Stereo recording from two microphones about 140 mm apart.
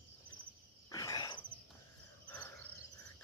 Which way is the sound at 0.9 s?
25° left (ahead or behind).